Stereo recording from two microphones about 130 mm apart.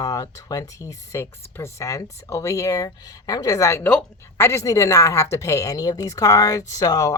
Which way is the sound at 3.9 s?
10° left (ahead or behind).